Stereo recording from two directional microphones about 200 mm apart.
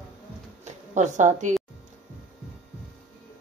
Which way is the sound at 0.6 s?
35° right (ahead or behind).